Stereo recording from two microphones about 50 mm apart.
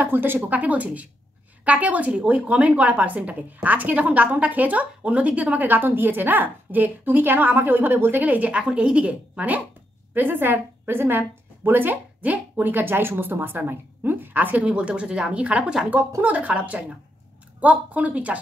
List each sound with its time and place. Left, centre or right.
0.0 s a woman's voice: right
10.1 s a woman's voice: right
14.6 s a woman's voice: right